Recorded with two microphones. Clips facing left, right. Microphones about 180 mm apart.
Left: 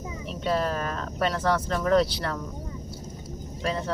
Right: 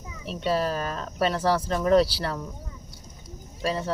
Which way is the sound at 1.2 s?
10° right (ahead or behind).